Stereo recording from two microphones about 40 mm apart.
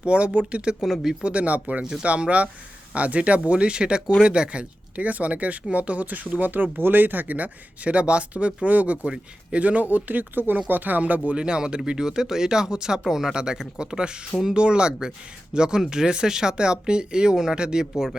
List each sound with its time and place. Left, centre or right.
0.0 s speech: right
0.8 s speech: centre
1.2 s speech: right
1.8 s speech: centre
2.0 s speech: right
7.9 s speech: right
9.0 s speech: right
9.6 s speech: right
11.3 s speech: right